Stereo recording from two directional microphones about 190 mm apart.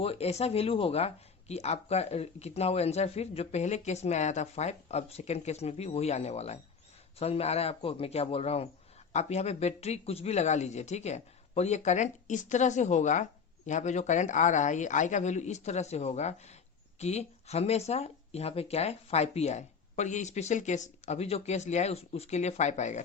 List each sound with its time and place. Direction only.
0.0 s speech: 30° left (ahead or behind)